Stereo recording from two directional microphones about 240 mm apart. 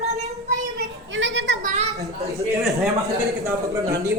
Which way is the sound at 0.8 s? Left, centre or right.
Right.